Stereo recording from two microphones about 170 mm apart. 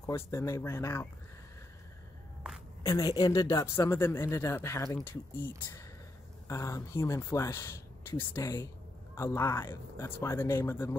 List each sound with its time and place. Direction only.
0.0 s speech: 15° left (ahead or behind)
2.8 s speech: 20° left (ahead or behind)